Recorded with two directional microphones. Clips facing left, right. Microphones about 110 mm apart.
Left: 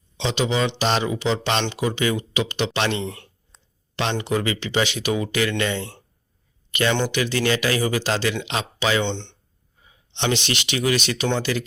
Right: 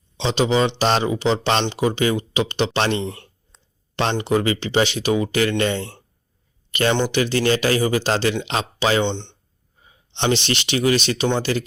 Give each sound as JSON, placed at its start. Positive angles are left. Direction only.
{"t": 0.2, "sound": "speech", "side_deg": -35}
{"t": 4.2, "sound": "speech", "side_deg": -30}
{"t": 9.0, "sound": "speech", "side_deg": -15}
{"t": 10.2, "sound": "speech", "side_deg": -35}